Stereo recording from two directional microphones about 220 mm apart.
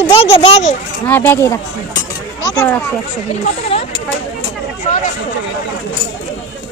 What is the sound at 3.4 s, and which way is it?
Speech, 30° left (ahead or behind).